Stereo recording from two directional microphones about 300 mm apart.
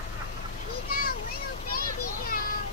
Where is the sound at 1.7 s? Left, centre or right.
Left.